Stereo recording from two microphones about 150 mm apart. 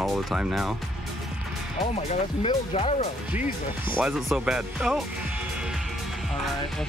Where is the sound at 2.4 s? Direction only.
45° left (ahead or behind).